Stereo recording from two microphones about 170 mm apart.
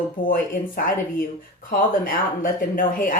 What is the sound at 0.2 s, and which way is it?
Speech, 55° left (ahead or behind).